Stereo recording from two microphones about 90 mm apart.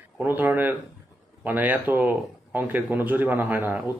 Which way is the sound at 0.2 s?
20° right (ahead or behind).